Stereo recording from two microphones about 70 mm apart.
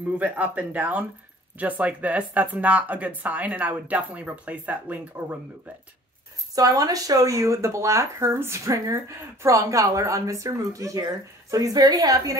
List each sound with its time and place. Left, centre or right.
0.2 s speech: right
6.5 s speech: right